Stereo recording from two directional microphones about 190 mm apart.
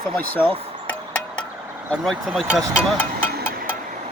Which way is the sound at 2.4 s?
15° right (ahead or behind).